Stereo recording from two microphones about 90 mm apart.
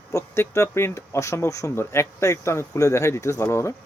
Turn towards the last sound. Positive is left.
turn(degrees=30)  # may be behind; listen again after turning